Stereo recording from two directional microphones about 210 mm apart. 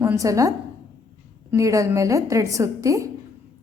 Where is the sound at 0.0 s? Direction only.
15° right (ahead or behind).